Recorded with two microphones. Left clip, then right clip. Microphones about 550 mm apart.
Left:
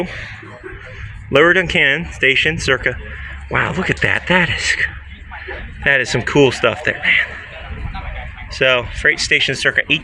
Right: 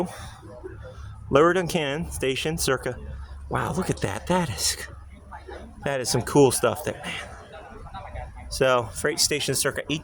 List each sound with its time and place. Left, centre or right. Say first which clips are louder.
1.3 s a man's voice: left 8 dB; right
8.5 s speech: left 7 dB; right